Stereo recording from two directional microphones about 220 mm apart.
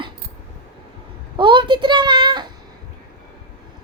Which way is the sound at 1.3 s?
20° right (ahead or behind).